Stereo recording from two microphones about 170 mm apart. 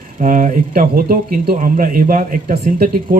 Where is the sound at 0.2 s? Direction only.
50° right (ahead or behind).